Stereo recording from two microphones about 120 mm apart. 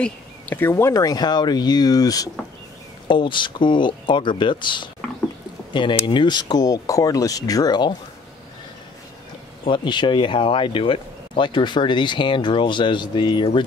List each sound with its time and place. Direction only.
0.0 s speech: 15° left (ahead or behind)
0.9 s speech: 35° left (ahead or behind)
3.1 s speech: 40° left (ahead or behind)
9.7 s speech: 40° left (ahead or behind)